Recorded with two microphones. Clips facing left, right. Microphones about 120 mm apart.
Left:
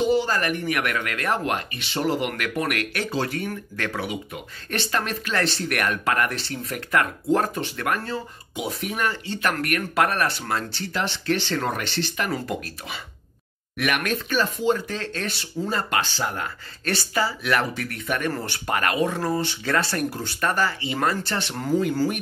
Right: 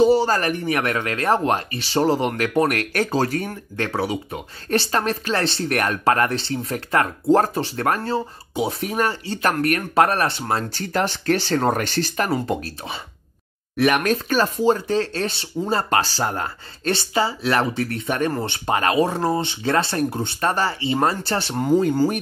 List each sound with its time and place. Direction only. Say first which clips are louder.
0.0 s speech: right 5 dB; 35° right (ahead or behind)
10.7 s speech: right 5 dB; 45° right (ahead or behind)
12.3 s speech: right 5 dB; 30° right (ahead or behind)
16.8 s speech: right 4 dB; 25° right (ahead or behind)